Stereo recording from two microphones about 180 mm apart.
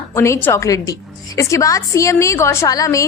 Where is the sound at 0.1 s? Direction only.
15° left (ahead or behind).